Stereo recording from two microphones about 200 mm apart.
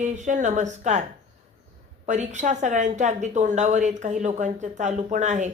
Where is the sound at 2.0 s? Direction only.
35° right (ahead or behind).